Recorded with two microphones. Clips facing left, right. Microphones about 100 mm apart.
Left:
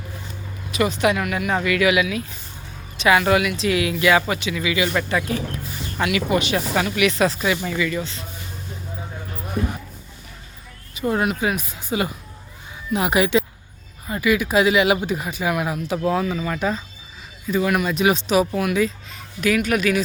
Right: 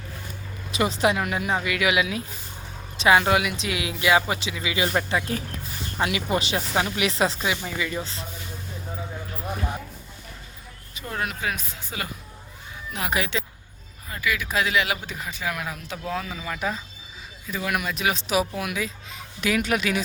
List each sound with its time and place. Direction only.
0.7 s speech: 30° right (ahead or behind)
1.6 s speech: 15° right (ahead or behind)
11.0 s speech: 20° left (ahead or behind)
16.2 s speech: centre (ahead or behind)
19.4 s speech: 25° right (ahead or behind)